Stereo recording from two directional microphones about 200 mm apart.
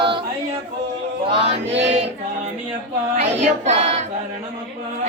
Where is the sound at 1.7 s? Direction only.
60° right (ahead or behind).